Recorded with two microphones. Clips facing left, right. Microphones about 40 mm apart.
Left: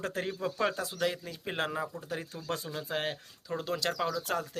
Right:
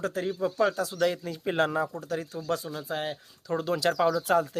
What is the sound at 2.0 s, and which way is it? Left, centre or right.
Speech, left.